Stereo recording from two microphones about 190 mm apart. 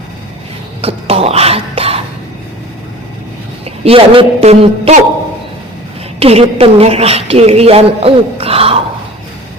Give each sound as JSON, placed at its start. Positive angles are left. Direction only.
{"t": 0.8, "sound": "cough", "side_deg": -30}
{"t": 3.8, "sound": "a woman's voice", "side_deg": -30}
{"t": 6.1, "sound": "a woman's voice", "side_deg": -30}